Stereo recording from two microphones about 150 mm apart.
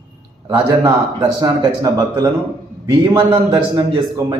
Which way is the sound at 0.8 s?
25° right (ahead or behind).